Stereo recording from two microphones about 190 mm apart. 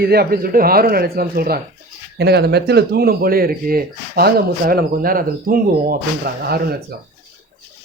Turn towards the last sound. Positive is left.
turn(degrees=-55)  # may be behind; listen again after turning